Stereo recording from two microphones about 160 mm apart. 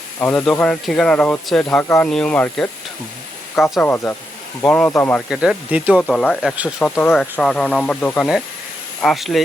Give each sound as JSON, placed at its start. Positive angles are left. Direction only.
{"t": 0.2, "sound": "speech", "side_deg": 10}
{"t": 1.8, "sound": "speech", "side_deg": 15}
{"t": 2.0, "sound": "speech", "side_deg": 5}
{"t": 5.3, "sound": "speech", "side_deg": -5}
{"t": 6.0, "sound": "speech", "side_deg": 5}
{"t": 6.4, "sound": "speech", "side_deg": -5}
{"t": 6.7, "sound": "speech", "side_deg": 10}